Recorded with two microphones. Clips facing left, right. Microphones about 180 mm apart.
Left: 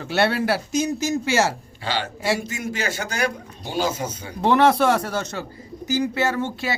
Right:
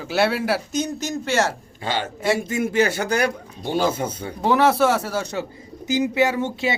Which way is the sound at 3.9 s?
30° right (ahead or behind).